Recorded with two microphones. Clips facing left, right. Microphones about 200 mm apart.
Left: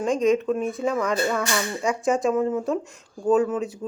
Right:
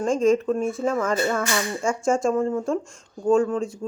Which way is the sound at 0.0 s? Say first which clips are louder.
Right 1 dB; centre (ahead or behind).